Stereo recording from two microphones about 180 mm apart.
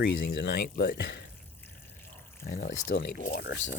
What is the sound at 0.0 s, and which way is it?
Speech, 80° left.